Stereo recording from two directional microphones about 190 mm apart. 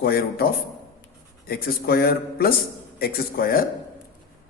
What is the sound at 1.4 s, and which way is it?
A man's voice, 50° left (ahead or behind).